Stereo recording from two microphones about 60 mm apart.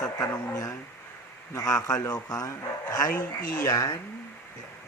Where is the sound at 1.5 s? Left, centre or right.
Left.